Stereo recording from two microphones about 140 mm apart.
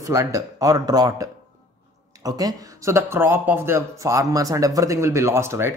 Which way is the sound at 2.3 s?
25° right (ahead or behind).